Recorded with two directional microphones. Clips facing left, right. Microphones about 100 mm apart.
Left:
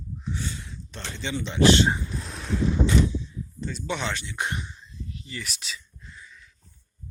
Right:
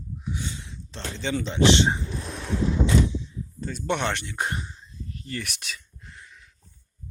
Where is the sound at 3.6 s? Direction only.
45° right (ahead or behind).